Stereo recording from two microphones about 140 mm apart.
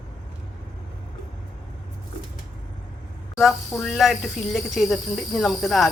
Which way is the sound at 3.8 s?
Centre (ahead or behind).